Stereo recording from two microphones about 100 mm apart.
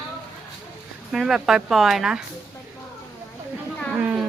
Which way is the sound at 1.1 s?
5° right (ahead or behind).